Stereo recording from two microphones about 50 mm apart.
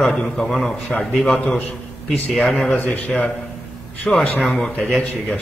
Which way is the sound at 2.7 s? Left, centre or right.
Left.